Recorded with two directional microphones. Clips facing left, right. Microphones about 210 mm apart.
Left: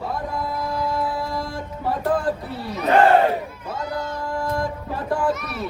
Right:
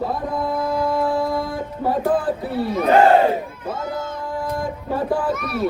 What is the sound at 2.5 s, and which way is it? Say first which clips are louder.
Speech: right 8 dB; 55° right (ahead or behind).